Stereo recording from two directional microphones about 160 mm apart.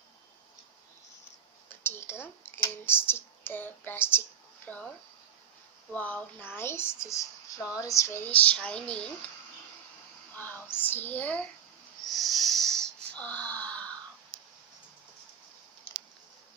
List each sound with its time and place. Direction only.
1.7 s speech: 15° left (ahead or behind)
7.7 s a sound: 20° left (ahead or behind)
8.3 s speech: 10° left (ahead or behind)
10.3 s a sound: 10° left (ahead or behind)
10.8 s speech: 10° left (ahead or behind)
12.1 s wheeze: centre (ahead or behind)